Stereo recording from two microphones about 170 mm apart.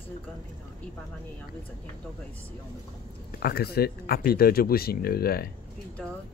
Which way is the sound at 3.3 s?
60° left (ahead or behind).